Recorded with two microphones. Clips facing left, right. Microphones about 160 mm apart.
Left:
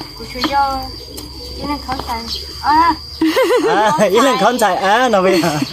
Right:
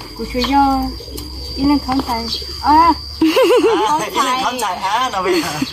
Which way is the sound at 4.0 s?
90° left.